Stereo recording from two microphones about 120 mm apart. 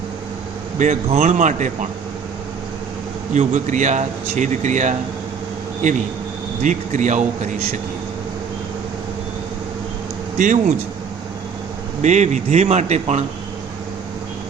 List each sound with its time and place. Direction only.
0.8 s speech: 75° right (ahead or behind)
3.3 s speech: 85° right
10.3 s speech: 90° right
12.0 s a man's voice: 75° right (ahead or behind)